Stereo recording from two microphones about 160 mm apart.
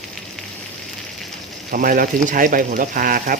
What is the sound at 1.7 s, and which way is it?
Speech, 60° right (ahead or behind).